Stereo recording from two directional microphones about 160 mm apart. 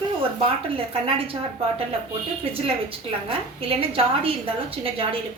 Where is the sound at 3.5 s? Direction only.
35° right (ahead or behind).